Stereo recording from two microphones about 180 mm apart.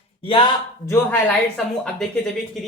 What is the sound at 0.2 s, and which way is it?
Speech, 30° left (ahead or behind).